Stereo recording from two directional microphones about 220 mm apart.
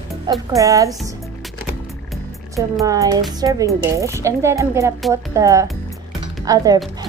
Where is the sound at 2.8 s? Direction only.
15° right (ahead or behind).